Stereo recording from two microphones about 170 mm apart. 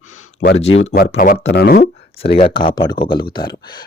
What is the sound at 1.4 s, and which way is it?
Speech, 70° left (ahead or behind).